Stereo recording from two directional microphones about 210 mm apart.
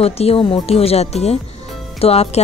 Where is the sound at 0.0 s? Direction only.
30° left (ahead or behind).